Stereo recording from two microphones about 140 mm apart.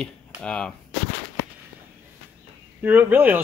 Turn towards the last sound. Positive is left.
turn(degrees=-15)  # may be behind; listen again after turning